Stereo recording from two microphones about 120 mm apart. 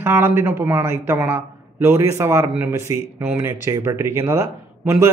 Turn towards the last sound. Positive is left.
turn(degrees=-20)  # may be behind; listen again after turning